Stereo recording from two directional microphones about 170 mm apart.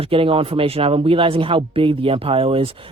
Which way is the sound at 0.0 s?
30° right (ahead or behind).